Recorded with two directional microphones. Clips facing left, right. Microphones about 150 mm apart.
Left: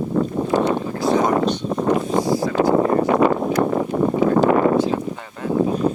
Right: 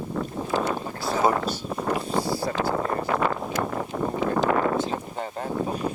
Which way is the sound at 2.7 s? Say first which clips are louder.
Left 10 dB; 30° left (ahead or behind).